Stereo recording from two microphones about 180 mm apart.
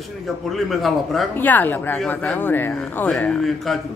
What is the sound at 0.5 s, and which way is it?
Speech, centre (ahead or behind).